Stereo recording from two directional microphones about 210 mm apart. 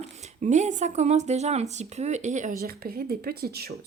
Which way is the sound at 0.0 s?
35° right (ahead or behind).